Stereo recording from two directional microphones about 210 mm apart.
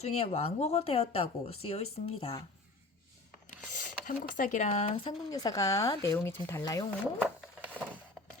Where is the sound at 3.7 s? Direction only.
40° left (ahead or behind).